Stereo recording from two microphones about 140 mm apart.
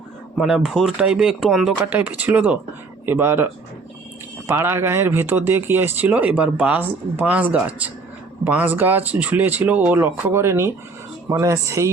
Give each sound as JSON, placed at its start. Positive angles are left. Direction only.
{"t": 0.3, "sound": "speech", "side_deg": -5}
{"t": 1.8, "sound": "speech", "side_deg": -10}